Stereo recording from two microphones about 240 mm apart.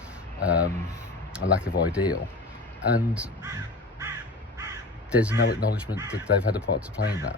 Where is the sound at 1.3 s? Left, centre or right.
Centre.